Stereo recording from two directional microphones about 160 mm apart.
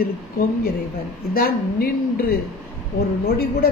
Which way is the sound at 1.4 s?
70° left (ahead or behind).